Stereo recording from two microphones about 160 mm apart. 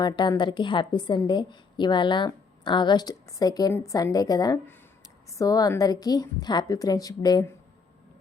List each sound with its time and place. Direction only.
0.0 s a woman's voice: 25° left (ahead or behind)